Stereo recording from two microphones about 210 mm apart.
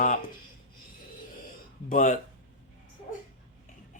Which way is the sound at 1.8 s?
35° left (ahead or behind).